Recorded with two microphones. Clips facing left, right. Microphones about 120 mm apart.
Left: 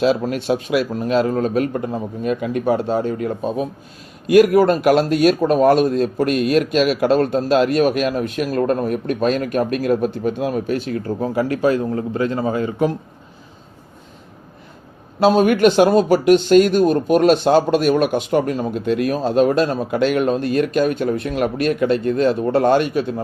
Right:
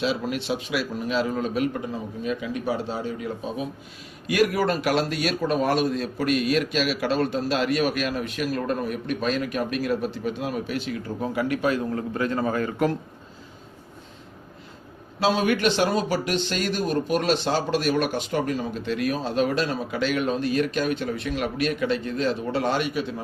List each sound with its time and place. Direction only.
0.0 s speech: 45° left (ahead or behind); by 13.0 s 20° left (ahead or behind)
15.2 s speech: 45° left (ahead or behind)